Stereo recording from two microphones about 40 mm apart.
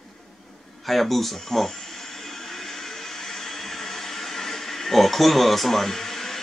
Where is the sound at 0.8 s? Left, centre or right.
Centre.